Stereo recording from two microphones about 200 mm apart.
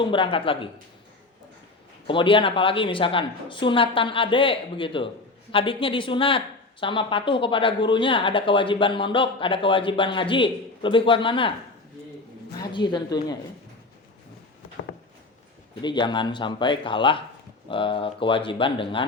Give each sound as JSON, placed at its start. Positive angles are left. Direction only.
{"t": 0.0, "sound": "a woman's voice", "side_deg": 25}
{"t": 2.0, "sound": "a woman's voice", "side_deg": 25}
{"t": 12.5, "sound": "a woman's voice", "side_deg": 20}
{"t": 15.8, "sound": "a woman's voice", "side_deg": 20}